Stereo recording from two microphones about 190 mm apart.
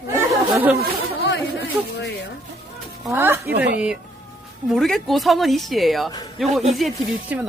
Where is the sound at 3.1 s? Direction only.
10° right (ahead or behind).